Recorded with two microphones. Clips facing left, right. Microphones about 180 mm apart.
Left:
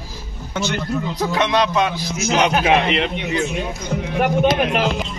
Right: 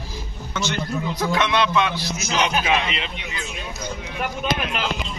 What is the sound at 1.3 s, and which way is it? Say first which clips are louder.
Speech: left 2 dB; 35° left (ahead or behind).